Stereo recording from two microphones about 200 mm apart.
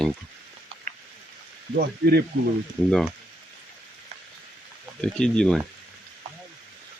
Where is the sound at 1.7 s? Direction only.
55° right (ahead or behind).